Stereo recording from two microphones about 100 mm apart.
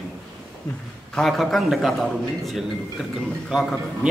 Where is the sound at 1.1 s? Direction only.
Centre (ahead or behind).